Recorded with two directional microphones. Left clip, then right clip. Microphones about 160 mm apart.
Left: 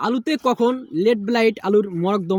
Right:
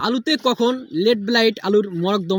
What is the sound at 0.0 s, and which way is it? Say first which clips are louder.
Speech: right 1 dB; 5° left (ahead or behind).